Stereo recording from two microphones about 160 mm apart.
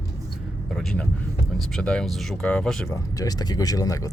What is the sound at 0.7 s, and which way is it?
Speech, 5° left (ahead or behind).